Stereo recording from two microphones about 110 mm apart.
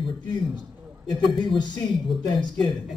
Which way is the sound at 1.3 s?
45° left (ahead or behind).